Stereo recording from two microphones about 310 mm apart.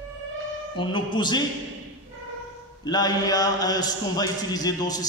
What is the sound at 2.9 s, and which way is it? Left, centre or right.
A man's voice, centre.